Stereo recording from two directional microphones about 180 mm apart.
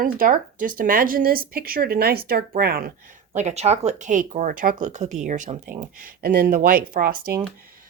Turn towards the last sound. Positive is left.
turn(degrees=-50)  # may be behind; listen again after turning